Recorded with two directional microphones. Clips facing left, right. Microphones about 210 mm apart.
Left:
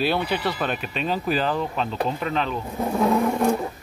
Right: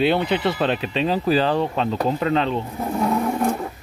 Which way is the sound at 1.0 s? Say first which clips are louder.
Right 4 dB; 35° right (ahead or behind).